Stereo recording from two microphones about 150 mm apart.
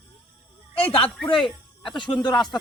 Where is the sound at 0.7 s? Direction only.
40° left (ahead or behind).